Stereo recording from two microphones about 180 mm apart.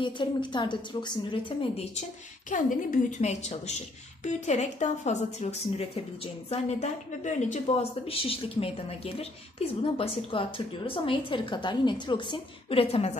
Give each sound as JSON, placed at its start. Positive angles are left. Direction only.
{"t": 0.0, "sound": "a woman's voice", "side_deg": 25}
{"t": 2.5, "sound": "a woman's voice", "side_deg": 45}